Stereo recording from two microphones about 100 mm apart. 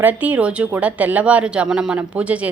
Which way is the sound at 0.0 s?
15° right (ahead or behind).